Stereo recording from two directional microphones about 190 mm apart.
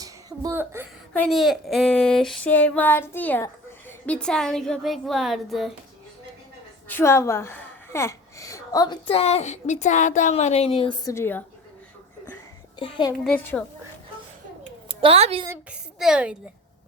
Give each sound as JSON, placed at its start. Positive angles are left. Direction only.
{"t": 0.0, "sound": "a sound", "side_deg": -20}
{"t": 1.1, "sound": "a woman's voice", "side_deg": 5}
{"t": 6.8, "sound": "a woman's voice", "side_deg": 10}
{"t": 11.1, "sound": "speech", "side_deg": 10}
{"t": 12.8, "sound": "a child's voice", "side_deg": 25}
{"t": 13.2, "sound": "a woman's voice", "side_deg": 5}
{"t": 14.8, "sound": "speech", "side_deg": -30}
{"t": 15.4, "sound": "a woman's voice", "side_deg": -5}